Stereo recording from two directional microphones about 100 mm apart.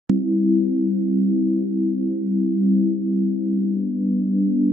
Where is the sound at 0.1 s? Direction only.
5° left (ahead or behind).